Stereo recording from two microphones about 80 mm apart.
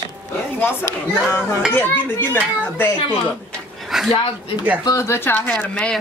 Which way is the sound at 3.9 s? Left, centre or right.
Centre.